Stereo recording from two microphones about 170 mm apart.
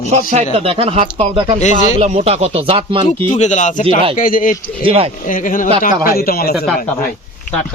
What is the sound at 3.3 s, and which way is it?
Speech, 45° left (ahead or behind).